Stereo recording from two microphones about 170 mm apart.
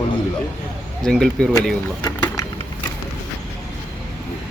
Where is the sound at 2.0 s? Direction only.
20° left (ahead or behind).